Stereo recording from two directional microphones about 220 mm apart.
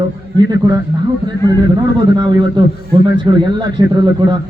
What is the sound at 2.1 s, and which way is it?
A man's voice, 20° right (ahead or behind).